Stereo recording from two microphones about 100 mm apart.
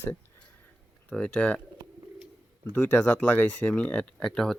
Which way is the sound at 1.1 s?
10° left (ahead or behind).